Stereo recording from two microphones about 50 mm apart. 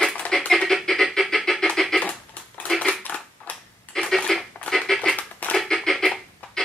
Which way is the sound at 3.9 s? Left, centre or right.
Centre.